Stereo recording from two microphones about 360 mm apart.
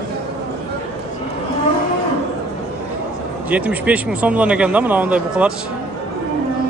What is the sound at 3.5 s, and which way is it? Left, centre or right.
A man's voice, centre.